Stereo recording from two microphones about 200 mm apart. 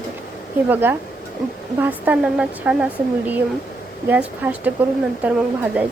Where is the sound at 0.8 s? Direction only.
10° right (ahead or behind).